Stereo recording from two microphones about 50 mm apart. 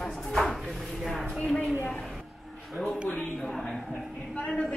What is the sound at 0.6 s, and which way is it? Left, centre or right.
Chopping, centre.